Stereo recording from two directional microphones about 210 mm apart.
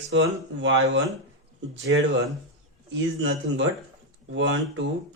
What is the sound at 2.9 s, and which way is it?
Speech, 60° right (ahead or behind).